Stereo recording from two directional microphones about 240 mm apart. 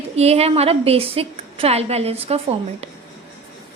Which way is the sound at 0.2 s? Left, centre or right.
Right.